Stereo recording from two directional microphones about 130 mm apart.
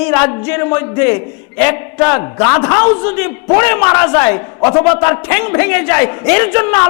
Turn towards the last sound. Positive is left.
turn(degrees=20)  # may be behind; listen again after turning